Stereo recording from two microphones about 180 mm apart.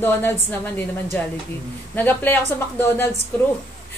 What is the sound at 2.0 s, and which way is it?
A woman's voice, 10° left (ahead or behind).